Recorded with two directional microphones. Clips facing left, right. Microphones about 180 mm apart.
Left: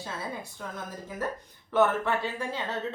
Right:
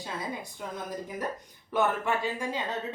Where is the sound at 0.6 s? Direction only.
15° right (ahead or behind).